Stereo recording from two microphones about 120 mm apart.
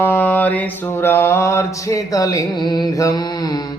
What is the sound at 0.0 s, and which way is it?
Mantra, 15° left (ahead or behind).